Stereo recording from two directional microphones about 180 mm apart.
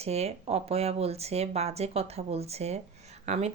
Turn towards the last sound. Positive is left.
turn(degrees=-40)  # may be behind; listen again after turning